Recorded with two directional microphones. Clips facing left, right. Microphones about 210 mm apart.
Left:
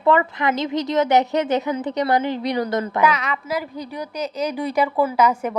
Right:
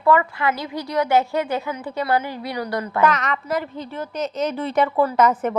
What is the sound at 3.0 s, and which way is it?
Speech, 10° left (ahead or behind).